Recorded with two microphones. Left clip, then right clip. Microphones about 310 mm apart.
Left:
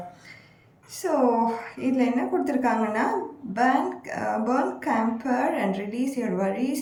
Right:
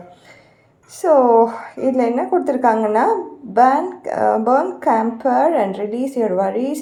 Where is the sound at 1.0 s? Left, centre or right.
Right.